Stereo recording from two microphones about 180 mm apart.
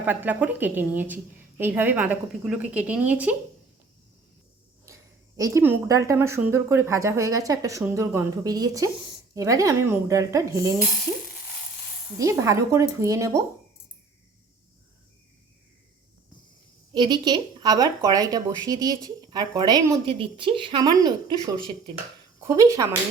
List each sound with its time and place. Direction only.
0.0 s a woman's voice: 10° right (ahead or behind)
5.4 s a woman's voice: 15° right (ahead or behind)
12.1 s a woman's voice: 15° right (ahead or behind)
16.9 s speech: 25° right (ahead or behind)
20.1 s a woman's voice: 30° right (ahead or behind)